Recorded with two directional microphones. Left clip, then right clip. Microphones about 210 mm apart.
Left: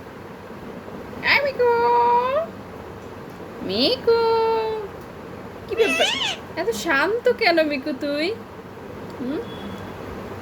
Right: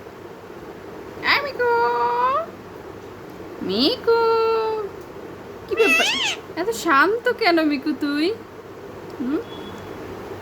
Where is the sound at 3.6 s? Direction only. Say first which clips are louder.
Even; 20° right (ahead or behind).